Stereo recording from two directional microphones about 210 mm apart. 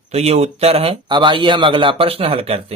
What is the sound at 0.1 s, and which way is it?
Speech, 30° right (ahead or behind).